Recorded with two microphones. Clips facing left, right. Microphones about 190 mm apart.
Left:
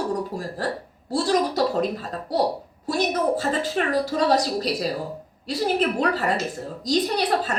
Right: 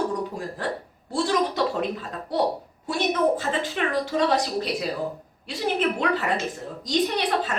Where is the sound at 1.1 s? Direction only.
40° left (ahead or behind).